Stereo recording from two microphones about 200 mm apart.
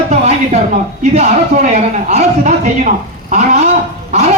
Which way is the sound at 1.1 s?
35° right (ahead or behind).